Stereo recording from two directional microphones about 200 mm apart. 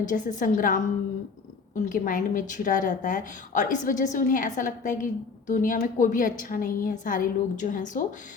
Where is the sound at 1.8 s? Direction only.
40° left (ahead or behind).